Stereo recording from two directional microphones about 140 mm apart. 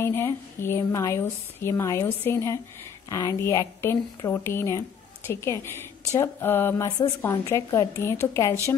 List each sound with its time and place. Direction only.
0.0 s speech: 15° left (ahead or behind)